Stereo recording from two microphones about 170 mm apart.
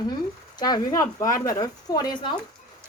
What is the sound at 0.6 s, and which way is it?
Speech, 20° left (ahead or behind).